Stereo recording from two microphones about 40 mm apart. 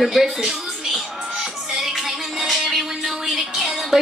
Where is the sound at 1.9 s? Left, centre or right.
Centre.